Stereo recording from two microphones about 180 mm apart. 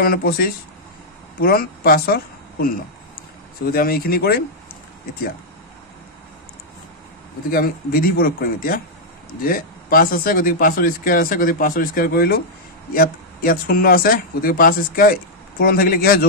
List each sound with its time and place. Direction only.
0.0 s speech: 55° left (ahead or behind)
7.5 s speech: 55° left (ahead or behind)